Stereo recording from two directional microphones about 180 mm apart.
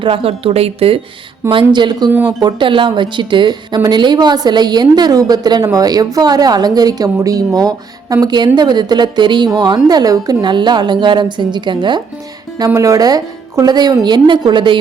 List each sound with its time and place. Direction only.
0.0 s a woman's voice: 30° right (ahead or behind)